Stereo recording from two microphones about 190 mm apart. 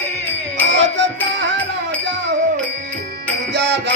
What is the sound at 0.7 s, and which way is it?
Music, 70° right (ahead or behind).